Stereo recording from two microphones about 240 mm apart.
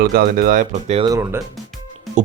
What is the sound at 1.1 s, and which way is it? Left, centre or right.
Speech, centre.